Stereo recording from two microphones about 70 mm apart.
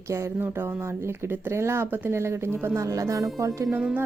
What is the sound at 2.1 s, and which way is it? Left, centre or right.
Speech, right.